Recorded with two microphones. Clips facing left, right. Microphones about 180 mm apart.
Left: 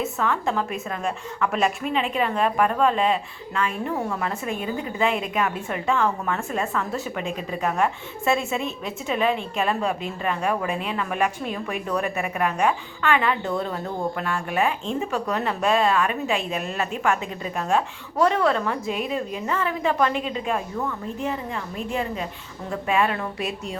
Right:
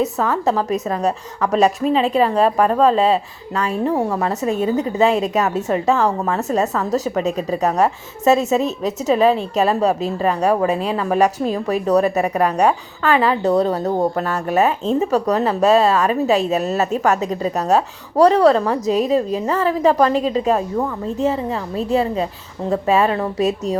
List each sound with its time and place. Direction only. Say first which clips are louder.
0.0 s a woman's voice: right 6 dB; 40° right (ahead or behind)